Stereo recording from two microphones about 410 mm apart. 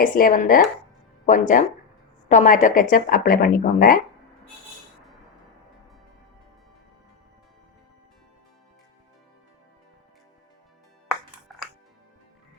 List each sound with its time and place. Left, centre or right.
0.0 s a woman's voice: centre